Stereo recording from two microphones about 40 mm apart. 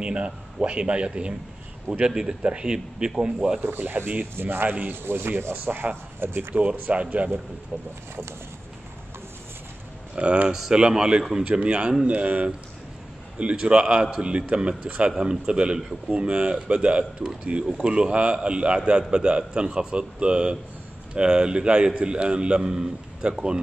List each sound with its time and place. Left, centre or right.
0.0 s a man's voice: right
3.8 s speech: right
4.4 s speech: right
4.6 s speech: right
5.0 s speech: right
6.5 s speech: right
10.1 s a man's voice: right